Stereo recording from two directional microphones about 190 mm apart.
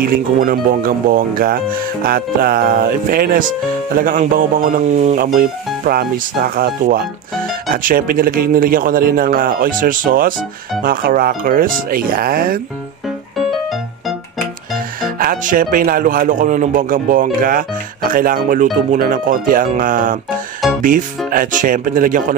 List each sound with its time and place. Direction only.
0.0 s speech: 50° right (ahead or behind)
15.1 s speech: 45° right (ahead or behind)
20.6 s music: centre (ahead or behind)
21.3 s speech: 45° right (ahead or behind)